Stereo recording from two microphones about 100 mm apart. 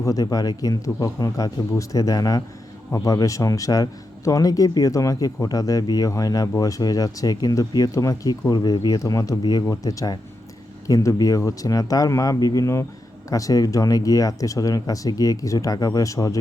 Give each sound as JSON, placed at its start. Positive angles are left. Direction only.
{"t": 0.0, "sound": "a man's voice", "side_deg": 35}